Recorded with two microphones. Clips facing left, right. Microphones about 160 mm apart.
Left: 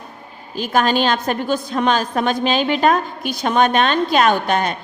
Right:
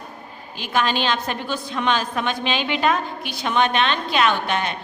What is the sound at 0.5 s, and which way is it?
A woman's voice, 40° left (ahead or behind).